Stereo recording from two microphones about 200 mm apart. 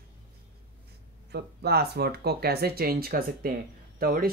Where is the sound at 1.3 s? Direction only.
55° right (ahead or behind).